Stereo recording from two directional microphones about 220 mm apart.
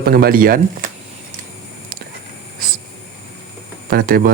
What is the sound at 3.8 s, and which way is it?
Speech, 40° right (ahead or behind).